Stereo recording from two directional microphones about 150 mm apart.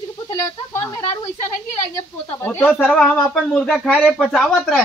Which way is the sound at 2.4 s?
10° left (ahead or behind).